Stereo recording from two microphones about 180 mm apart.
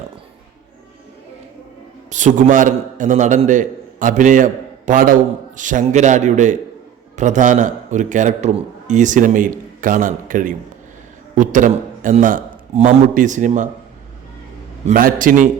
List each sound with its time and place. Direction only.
2.0 s a man's voice: 45° right (ahead or behind)
14.8 s a man's voice: 50° right (ahead or behind)